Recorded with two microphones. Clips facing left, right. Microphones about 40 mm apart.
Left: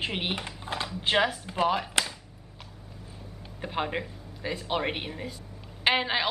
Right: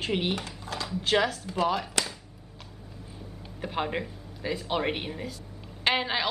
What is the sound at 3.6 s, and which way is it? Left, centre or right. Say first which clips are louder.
A woman's voice: even; centre.